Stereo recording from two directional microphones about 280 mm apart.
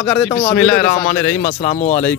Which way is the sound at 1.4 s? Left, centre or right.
Left.